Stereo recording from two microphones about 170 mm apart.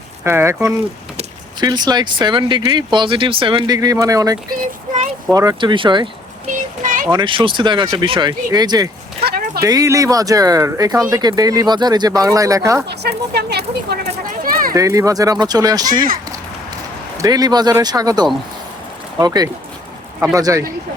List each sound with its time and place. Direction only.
0.3 s speech: 15° right (ahead or behind); by 3.8 s 30° right (ahead or behind)
3.8 s speech: 20° right (ahead or behind)
6.8 s a sound: 50° right (ahead or behind)
7.1 s speech: 25° right (ahead or behind)
12.9 s speech: 75° right (ahead or behind)
14.4 s children playing: 55° right (ahead or behind)
14.7 s speech: 20° right (ahead or behind)
17.2 s speech: 20° right (ahead or behind)